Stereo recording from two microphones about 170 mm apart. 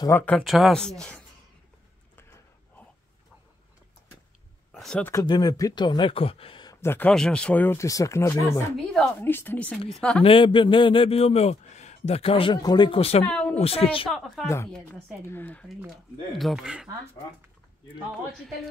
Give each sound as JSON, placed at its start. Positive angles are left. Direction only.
{"t": 0.0, "sound": "speech", "side_deg": 10}
{"t": 0.4, "sound": "speech", "side_deg": 0}
{"t": 4.7, "sound": "speech", "side_deg": 5}
{"t": 5.1, "sound": "speech", "side_deg": 25}
{"t": 6.8, "sound": "speech", "side_deg": 10}
{"t": 10.2, "sound": "a man's voice", "side_deg": 30}
{"t": 13.2, "sound": "speech", "side_deg": 5}
{"t": 13.6, "sound": "a man's voice", "side_deg": 35}
{"t": 14.1, "sound": "speech", "side_deg": 0}
{"t": 14.4, "sound": "speech", "side_deg": 15}
{"t": 16.3, "sound": "speech", "side_deg": 0}